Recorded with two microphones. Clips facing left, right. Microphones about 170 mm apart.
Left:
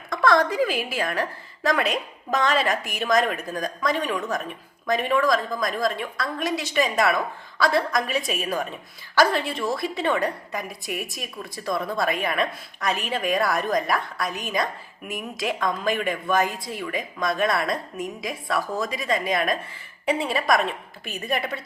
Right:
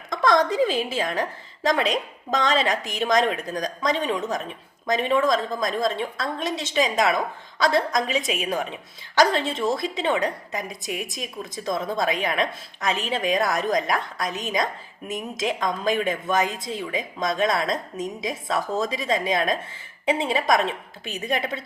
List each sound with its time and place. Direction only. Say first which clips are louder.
0.1 s a woman's voice: even; 20° right (ahead or behind)